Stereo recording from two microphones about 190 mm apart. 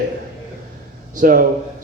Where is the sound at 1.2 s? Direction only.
50° right (ahead or behind).